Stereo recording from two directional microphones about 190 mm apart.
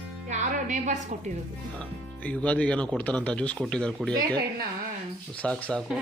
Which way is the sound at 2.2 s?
5° left (ahead or behind).